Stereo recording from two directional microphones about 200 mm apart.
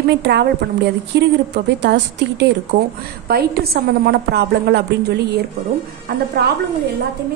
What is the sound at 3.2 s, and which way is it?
A woman's voice, 50° right (ahead or behind).